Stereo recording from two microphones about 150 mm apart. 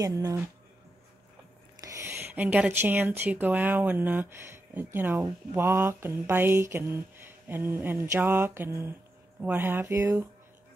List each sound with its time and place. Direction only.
0.0 s speech: 20° right (ahead or behind)
1.8 s speech: 20° right (ahead or behind)